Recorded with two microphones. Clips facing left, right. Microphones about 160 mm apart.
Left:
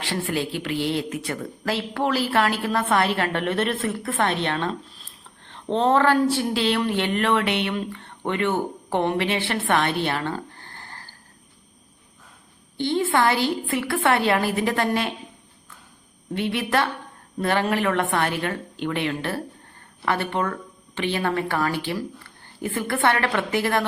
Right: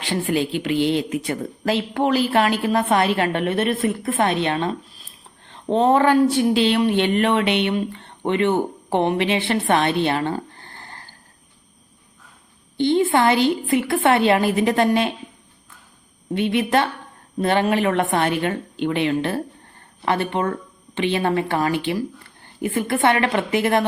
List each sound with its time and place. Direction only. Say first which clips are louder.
0.0 s speech: right 4 dB; 20° right (ahead or behind)
12.7 s speech: right 4 dB; 20° right (ahead or behind)
16.3 s speech: right 4 dB; 20° right (ahead or behind)